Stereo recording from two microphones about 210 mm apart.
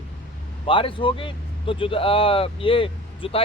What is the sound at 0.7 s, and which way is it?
Speech, 25° left (ahead or behind).